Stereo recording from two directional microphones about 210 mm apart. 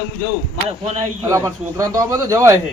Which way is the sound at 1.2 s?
15° right (ahead or behind).